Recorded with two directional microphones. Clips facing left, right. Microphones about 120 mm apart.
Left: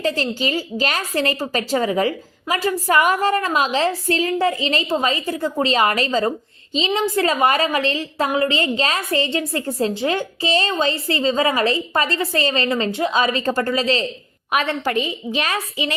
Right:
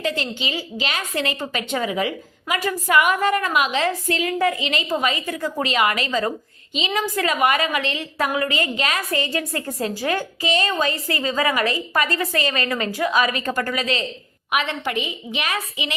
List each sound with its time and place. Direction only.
0.0 s a woman's voice: 35° left (ahead or behind)